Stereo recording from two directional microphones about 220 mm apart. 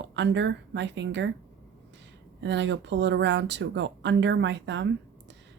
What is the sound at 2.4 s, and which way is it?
Speech, 55° right (ahead or behind).